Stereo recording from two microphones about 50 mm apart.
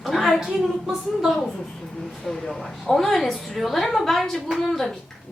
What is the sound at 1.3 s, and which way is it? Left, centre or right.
A woman's voice, centre.